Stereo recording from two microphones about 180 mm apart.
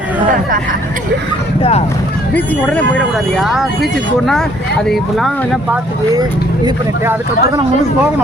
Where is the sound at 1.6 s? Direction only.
35° left (ahead or behind).